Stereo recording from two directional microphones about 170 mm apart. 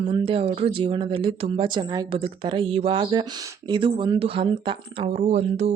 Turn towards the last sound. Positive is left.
turn(degrees=-40)  # may be behind; listen again after turning